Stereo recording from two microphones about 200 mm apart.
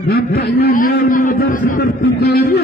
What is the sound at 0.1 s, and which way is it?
Speech, 55° left (ahead or behind).